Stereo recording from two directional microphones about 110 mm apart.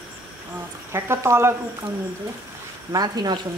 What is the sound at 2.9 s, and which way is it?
Speech, 35° right (ahead or behind).